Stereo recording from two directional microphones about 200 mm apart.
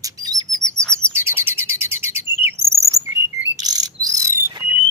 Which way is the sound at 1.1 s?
10° right (ahead or behind).